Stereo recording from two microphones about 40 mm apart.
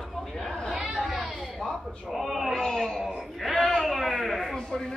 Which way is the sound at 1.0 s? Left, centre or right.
Centre.